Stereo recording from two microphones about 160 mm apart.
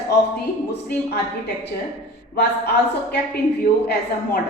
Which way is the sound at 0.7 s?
90° left.